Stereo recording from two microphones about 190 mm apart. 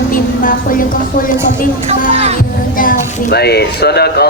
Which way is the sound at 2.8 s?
50° left (ahead or behind).